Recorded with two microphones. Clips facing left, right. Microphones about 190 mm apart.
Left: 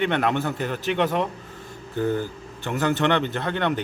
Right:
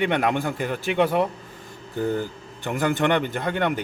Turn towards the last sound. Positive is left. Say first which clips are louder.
# even
turn(degrees=-10)  # may be behind; listen again after turning